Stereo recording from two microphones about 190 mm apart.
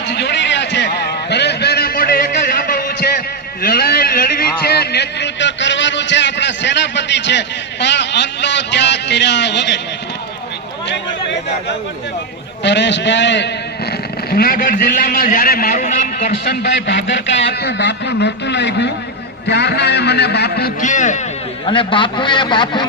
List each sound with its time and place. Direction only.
0.1 s a sound: 65° left (ahead or behind)
12.6 s a man's voice: 65° left (ahead or behind)
14.3 s a man's voice: 55° left (ahead or behind)
21.7 s a man's voice: 25° left (ahead or behind)